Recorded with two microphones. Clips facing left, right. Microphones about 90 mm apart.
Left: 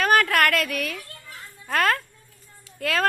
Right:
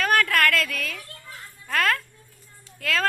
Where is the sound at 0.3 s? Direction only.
15° left (ahead or behind).